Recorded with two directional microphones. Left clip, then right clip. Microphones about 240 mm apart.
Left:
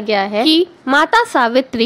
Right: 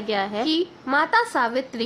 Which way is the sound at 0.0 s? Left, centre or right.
Left.